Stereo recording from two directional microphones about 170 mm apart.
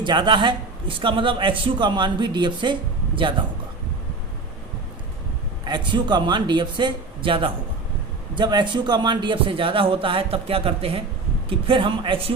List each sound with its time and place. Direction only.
0.0 s a man's voice: 25° right (ahead or behind)
5.6 s a man's voice: 25° right (ahead or behind)